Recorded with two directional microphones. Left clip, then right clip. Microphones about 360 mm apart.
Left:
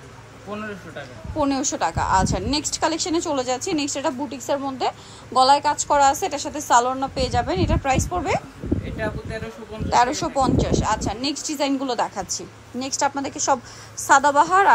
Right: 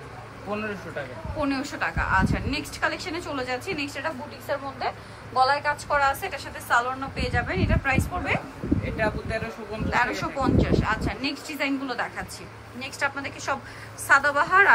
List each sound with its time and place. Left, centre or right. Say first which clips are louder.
1.4 s speech: left 5 dB; centre
8.9 s speech: right 2 dB; centre
9.8 s speech: left 6 dB; centre